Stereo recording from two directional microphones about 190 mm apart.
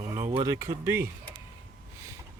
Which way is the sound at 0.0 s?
15° right (ahead or behind).